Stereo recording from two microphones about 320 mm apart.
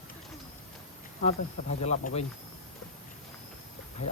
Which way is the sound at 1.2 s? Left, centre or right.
Left.